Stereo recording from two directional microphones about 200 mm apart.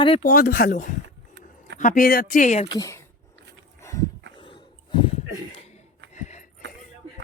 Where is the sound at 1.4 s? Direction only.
60° right (ahead or behind).